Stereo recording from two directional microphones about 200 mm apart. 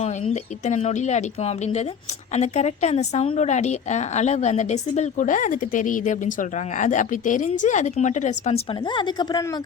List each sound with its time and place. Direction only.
0.6 s speech: 35° left (ahead or behind)